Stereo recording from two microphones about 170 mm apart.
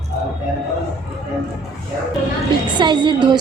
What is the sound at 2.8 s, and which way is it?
Speech, 25° right (ahead or behind).